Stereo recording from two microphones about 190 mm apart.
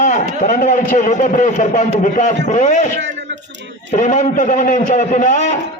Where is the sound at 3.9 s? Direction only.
40° left (ahead or behind).